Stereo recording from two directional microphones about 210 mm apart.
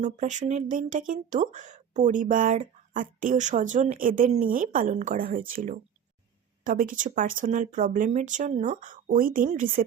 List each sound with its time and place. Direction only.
0.0 s speech: 35° right (ahead or behind)